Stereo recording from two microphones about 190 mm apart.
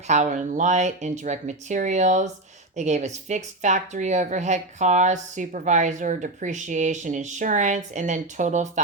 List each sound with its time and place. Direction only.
0.1 s a woman's voice: 40° right (ahead or behind)